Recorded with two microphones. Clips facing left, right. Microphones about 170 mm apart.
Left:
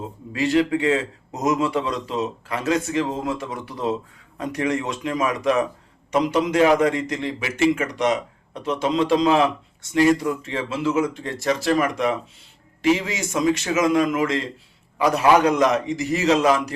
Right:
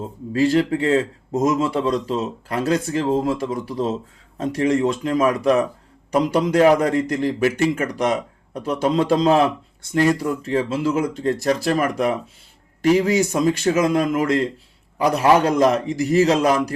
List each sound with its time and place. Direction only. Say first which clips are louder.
0.3 s a man's voice: right 2 dB; 40° right (ahead or behind)
14.9 s a man's voice: right 1 dB; 35° right (ahead or behind)